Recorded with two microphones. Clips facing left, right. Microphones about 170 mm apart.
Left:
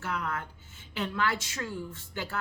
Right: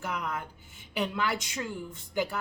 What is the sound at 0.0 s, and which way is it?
A woman's voice, 15° right (ahead or behind).